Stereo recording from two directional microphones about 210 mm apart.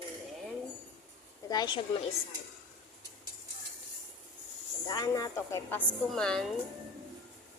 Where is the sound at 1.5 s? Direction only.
20° left (ahead or behind).